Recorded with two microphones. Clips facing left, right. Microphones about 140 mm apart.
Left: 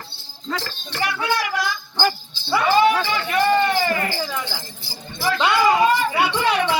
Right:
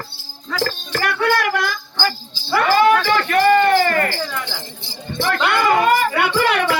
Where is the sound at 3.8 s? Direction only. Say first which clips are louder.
Right 4 dB; 60° right (ahead or behind).